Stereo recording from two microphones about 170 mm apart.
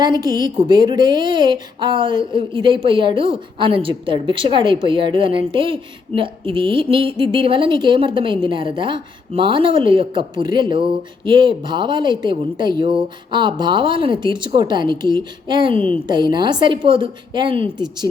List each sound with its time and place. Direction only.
0.0 s a woman's voice: 25° right (ahead or behind)